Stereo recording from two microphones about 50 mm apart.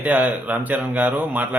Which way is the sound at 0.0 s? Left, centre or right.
Right.